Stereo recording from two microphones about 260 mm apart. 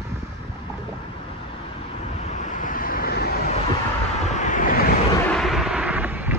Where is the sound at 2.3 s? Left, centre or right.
Left.